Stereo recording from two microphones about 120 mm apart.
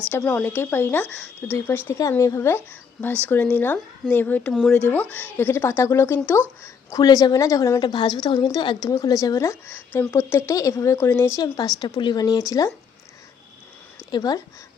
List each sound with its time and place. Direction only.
0.3 s a woman's voice: 15° left (ahead or behind)
11.3 s a woman's voice: 30° left (ahead or behind)
14.1 s a woman's voice: 35° left (ahead or behind)